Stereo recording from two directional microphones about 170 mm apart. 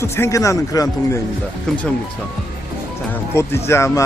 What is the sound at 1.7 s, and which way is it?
Speech, 5° left (ahead or behind).